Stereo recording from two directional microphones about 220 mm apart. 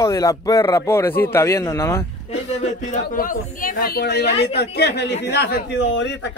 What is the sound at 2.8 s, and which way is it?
Speech, 35° left (ahead or behind).